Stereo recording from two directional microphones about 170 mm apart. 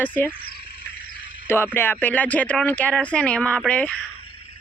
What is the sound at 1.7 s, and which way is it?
Speech, 15° left (ahead or behind).